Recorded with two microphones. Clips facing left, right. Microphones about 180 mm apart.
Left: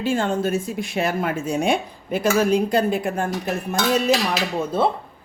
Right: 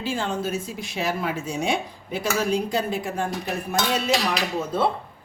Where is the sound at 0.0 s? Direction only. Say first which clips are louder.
Left 5 dB; 50° left (ahead or behind).